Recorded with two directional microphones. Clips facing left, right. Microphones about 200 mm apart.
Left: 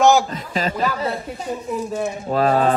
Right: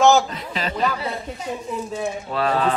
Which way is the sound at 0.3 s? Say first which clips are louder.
Left 4 dB; 45° left (ahead or behind).